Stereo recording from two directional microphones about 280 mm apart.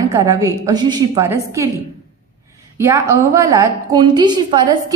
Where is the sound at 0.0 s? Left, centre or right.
Centre.